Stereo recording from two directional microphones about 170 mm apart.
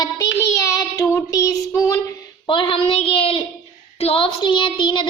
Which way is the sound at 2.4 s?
30° left (ahead or behind).